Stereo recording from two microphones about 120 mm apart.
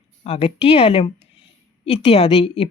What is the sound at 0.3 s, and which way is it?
Speech, 55° left (ahead or behind).